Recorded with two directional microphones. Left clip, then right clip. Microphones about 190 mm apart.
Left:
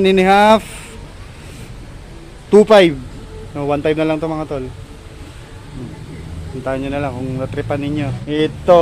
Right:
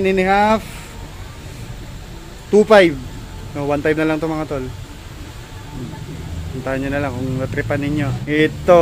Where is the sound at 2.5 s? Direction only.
25° left (ahead or behind); by 4.6 s 10° left (ahead or behind).